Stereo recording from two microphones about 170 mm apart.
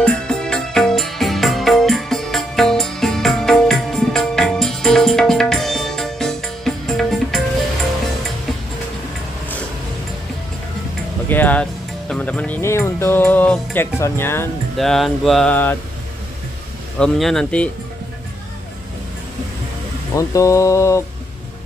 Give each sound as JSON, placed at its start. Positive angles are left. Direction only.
{"t": 0.0, "sound": "music", "side_deg": 5}
{"t": 11.2, "sound": "music", "side_deg": 10}
{"t": 14.8, "sound": "music", "side_deg": 0}
{"t": 15.5, "sound": "mantra", "side_deg": 10}
{"t": 17.0, "sound": "music", "side_deg": 0}
{"t": 20.2, "sound": "mantra", "side_deg": 20}